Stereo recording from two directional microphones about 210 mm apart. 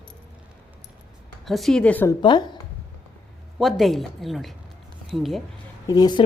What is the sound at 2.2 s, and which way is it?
Speech, 20° left (ahead or behind).